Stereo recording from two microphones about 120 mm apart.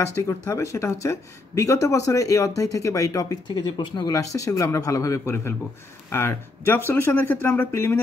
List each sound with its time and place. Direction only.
0.3 s speech: 25° left (ahead or behind)
4.1 s speech: 30° left (ahead or behind)